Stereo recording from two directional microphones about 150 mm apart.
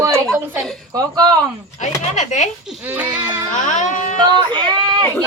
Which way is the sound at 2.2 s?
50° left (ahead or behind).